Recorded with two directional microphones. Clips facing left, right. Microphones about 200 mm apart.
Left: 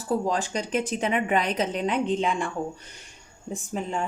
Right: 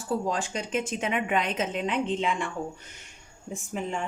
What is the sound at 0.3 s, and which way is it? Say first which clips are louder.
A woman's voice: left 3 dB; 40° left (ahead or behind).